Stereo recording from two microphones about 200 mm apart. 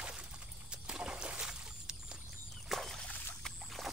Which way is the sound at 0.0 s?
5° right (ahead or behind).